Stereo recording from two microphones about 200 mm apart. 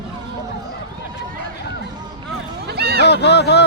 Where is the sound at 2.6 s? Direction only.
50° right (ahead or behind).